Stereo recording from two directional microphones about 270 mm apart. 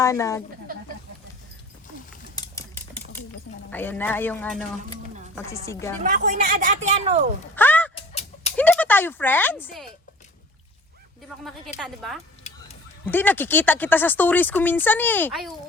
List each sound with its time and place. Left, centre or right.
0.0 s speech: centre
2.3 s typewriter: centre
3.7 s speech: centre
6.0 s speech: right
7.5 s a sound: centre
7.9 s a sound: left
8.5 s speech: centre
11.8 s speech: centre
12.4 s a sound: left
13.1 s speech: centre